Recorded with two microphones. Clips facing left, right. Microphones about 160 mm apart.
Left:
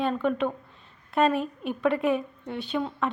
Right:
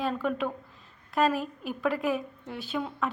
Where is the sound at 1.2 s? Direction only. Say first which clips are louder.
Left 3 dB; centre (ahead or behind).